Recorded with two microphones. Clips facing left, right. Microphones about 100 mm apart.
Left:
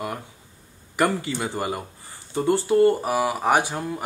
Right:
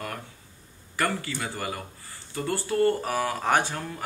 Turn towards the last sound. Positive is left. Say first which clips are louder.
# left 3 dB
turn(degrees=15)  # may be behind; listen again after turning